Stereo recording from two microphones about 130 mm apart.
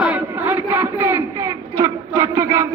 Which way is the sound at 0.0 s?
10° right (ahead or behind).